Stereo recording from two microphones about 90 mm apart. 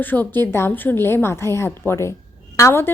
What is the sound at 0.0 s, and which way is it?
A woman's voice, 20° left (ahead or behind).